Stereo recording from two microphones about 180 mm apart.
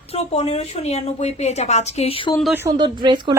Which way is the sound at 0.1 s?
35° left (ahead or behind).